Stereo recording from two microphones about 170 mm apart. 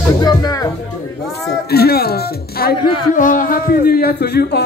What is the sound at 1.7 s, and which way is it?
A woman's voice, 65° left (ahead or behind).